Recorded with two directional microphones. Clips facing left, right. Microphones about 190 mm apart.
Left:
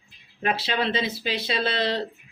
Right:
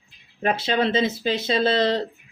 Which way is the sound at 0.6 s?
20° right (ahead or behind).